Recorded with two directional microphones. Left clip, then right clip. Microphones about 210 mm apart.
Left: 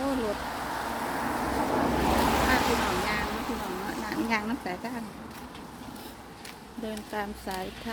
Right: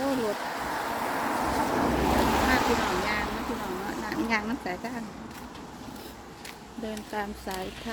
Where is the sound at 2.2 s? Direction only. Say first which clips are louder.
Even; 40° left (ahead or behind).